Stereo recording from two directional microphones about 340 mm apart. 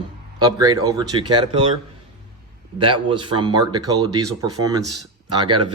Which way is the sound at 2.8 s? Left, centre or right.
Centre.